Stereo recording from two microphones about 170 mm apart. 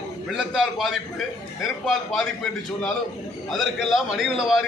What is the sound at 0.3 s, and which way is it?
A man's voice, centre (ahead or behind).